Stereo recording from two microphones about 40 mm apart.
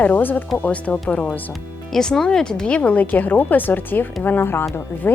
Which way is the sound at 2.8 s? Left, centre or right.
Left.